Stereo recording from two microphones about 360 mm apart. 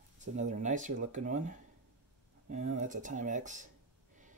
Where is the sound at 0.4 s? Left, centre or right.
Centre.